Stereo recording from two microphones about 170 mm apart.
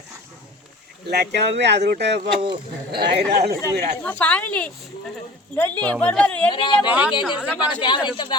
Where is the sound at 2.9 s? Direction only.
75° right (ahead or behind).